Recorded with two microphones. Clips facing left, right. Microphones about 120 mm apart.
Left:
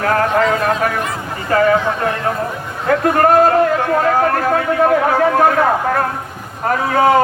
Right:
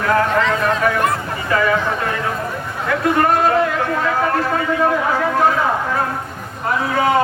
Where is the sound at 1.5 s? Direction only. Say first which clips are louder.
Left 4 dB; 40° left (ahead or behind).